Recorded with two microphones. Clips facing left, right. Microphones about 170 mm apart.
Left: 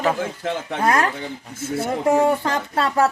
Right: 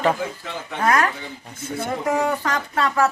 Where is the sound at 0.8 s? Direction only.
30° left (ahead or behind).